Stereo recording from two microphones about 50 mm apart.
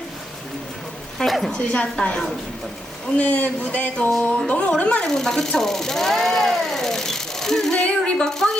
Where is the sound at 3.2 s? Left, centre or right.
Left.